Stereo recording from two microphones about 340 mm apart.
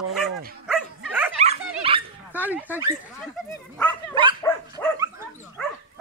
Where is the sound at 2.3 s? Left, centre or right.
Centre.